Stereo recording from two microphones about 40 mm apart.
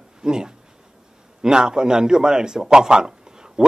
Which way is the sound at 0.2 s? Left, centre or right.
Centre.